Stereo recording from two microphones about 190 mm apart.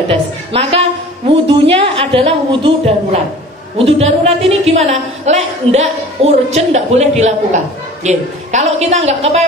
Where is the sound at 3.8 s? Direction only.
30° right (ahead or behind).